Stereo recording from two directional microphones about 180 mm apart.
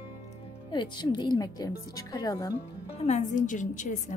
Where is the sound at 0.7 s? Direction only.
25° left (ahead or behind).